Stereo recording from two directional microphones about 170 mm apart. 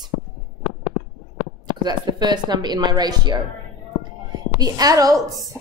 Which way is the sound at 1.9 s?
25° right (ahead or behind).